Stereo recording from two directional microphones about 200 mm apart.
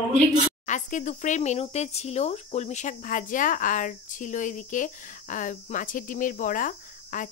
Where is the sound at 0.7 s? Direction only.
40° left (ahead or behind).